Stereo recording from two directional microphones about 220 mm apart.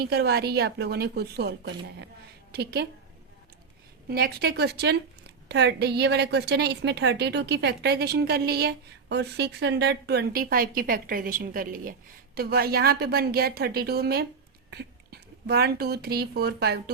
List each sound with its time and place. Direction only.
0.0 s a woman's voice: 45° right (ahead or behind)
4.1 s a woman's voice: 45° right (ahead or behind)